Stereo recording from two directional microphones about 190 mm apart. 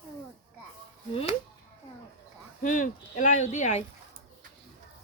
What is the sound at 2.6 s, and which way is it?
Speech, 45° left (ahead or behind).